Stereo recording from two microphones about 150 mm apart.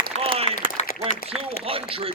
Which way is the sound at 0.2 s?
40° right (ahead or behind).